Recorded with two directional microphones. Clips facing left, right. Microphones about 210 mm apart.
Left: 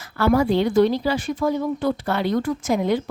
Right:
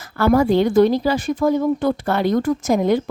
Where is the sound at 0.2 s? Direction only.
45° right (ahead or behind).